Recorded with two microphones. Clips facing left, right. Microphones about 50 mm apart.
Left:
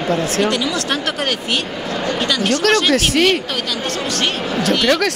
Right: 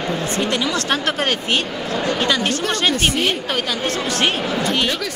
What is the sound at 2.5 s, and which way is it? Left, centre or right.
Speech, left.